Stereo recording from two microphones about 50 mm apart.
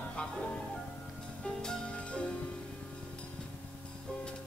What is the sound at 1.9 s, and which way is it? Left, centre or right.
Music, left.